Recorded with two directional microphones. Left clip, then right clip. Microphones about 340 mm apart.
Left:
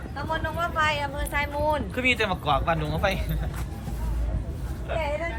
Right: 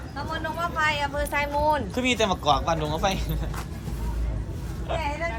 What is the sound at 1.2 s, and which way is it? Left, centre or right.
Speech, right.